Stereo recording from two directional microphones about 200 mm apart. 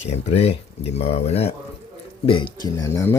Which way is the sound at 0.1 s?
30° left (ahead or behind).